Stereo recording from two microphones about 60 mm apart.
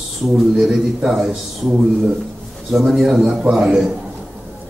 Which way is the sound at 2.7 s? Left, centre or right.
Centre.